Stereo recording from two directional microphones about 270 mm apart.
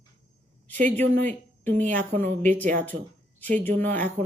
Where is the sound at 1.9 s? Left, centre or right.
Centre.